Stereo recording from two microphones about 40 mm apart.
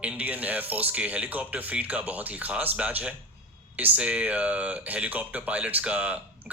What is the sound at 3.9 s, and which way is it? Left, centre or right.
Speech, right.